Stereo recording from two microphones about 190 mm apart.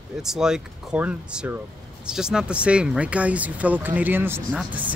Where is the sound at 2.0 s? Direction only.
5° right (ahead or behind).